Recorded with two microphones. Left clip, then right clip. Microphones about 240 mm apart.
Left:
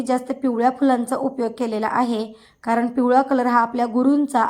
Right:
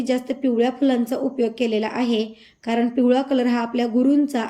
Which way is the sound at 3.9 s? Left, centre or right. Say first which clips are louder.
Even; centre.